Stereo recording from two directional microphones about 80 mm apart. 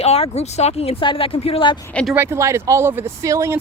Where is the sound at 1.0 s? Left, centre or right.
Left.